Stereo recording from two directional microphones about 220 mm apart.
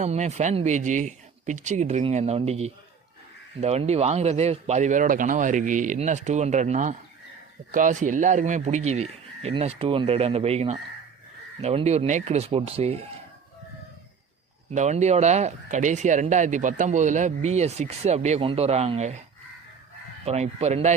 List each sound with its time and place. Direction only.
0.0 s a man's voice: 30° right (ahead or behind)
14.7 s speech: 30° right (ahead or behind)
20.2 s a man's voice: 30° right (ahead or behind)